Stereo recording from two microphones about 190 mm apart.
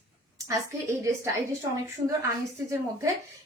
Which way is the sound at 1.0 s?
15° right (ahead or behind).